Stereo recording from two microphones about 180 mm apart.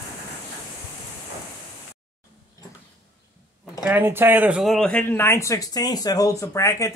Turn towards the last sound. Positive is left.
turn(degrees=15)  # may be behind; listen again after turning